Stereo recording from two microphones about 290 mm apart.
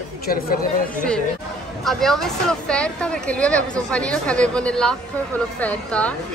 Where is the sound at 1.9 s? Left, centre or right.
Centre.